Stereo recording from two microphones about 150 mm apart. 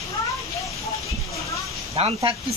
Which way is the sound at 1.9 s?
40° right (ahead or behind).